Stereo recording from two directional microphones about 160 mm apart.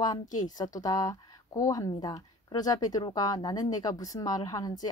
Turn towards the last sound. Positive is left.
turn(degrees=25)  # may be behind; listen again after turning